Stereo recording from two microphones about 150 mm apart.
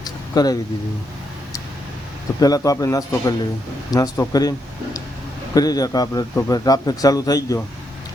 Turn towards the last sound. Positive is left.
turn(degrees=25)  # may be behind; listen again after turning